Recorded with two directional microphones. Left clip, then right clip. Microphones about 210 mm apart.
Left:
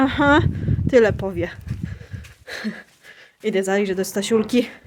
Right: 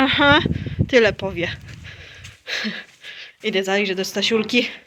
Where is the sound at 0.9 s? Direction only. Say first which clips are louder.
Even; 20° left (ahead or behind).